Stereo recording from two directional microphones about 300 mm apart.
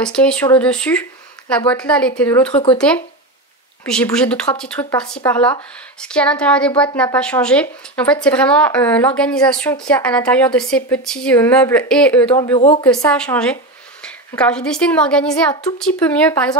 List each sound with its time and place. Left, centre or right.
0.0 s a woman's voice: centre
12.5 s speech: centre
12.8 s a woman's voice: centre